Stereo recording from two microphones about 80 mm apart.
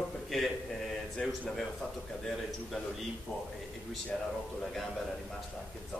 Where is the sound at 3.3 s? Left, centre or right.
Left.